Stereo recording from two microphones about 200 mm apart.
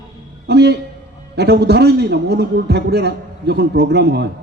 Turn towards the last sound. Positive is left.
turn(degrees=-55)  # may be behind; listen again after turning